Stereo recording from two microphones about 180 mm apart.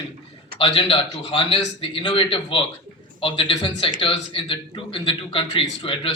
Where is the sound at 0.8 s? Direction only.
30° left (ahead or behind).